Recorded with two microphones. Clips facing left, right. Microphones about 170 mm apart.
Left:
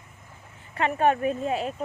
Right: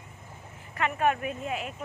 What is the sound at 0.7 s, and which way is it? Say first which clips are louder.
Speech: left 4 dB; 30° left (ahead or behind).